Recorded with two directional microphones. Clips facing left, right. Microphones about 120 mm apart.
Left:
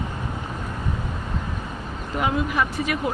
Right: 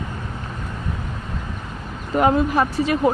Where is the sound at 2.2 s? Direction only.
40° right (ahead or behind).